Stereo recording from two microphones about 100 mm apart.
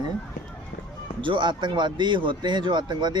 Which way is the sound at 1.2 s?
55° right (ahead or behind).